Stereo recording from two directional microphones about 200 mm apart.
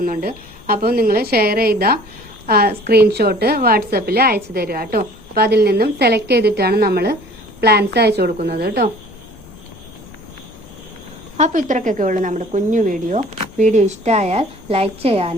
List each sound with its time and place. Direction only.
0.0 s a woman's voice: 45° right (ahead or behind)
11.3 s a woman's voice: 40° right (ahead or behind)